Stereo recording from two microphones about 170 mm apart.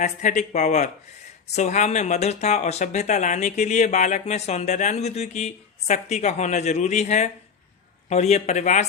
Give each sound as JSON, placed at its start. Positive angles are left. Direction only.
{"t": 0.0, "sound": "speech", "side_deg": 45}